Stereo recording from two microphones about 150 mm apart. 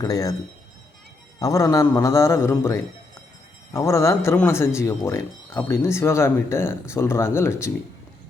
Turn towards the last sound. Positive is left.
turn(degrees=20)  # may be behind; listen again after turning